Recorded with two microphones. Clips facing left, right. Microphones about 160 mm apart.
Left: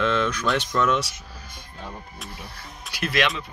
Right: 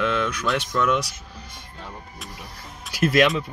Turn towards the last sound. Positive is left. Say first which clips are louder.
# right 6 dB
turn(degrees=-45)  # may be behind; listen again after turning